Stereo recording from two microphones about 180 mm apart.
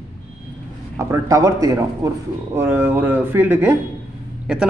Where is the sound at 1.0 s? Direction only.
15° right (ahead or behind).